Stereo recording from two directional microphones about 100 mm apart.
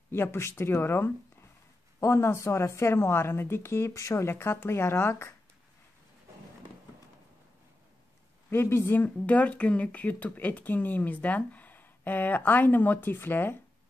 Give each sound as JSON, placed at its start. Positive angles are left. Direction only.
{"t": 0.1, "sound": "a woman's voice", "side_deg": 25}
{"t": 8.5, "sound": "speech", "side_deg": 25}